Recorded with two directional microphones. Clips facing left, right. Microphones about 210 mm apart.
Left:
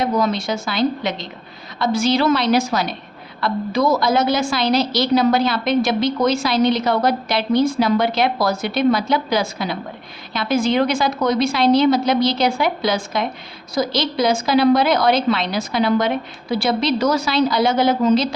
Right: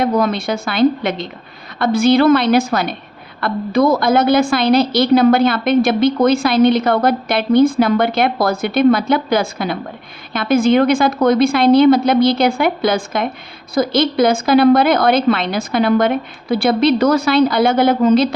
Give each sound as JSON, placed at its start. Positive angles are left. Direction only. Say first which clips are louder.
{"t": 0.0, "sound": "a woman's voice", "louder": "right 3 dB", "side_deg": -55}